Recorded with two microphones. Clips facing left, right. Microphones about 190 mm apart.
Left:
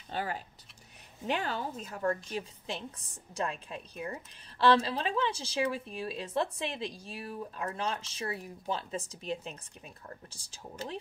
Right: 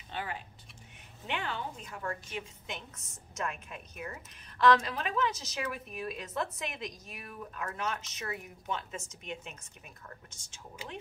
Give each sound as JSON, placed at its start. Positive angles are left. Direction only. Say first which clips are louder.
{"t": 0.1, "sound": "a woman's voice", "louder": "left 4 dB", "side_deg": 40}